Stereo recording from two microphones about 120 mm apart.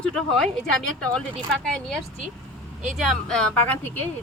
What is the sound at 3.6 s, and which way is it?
Speech, 15° left (ahead or behind).